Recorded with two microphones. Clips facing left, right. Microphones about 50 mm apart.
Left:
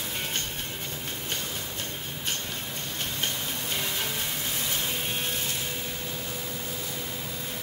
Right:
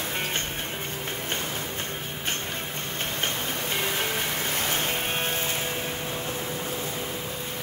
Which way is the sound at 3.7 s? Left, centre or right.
Right.